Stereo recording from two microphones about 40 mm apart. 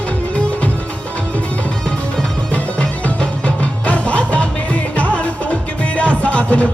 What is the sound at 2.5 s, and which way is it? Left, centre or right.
Music, left.